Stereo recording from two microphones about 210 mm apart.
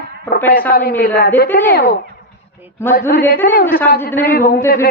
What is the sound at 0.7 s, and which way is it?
Speech, 45° left (ahead or behind).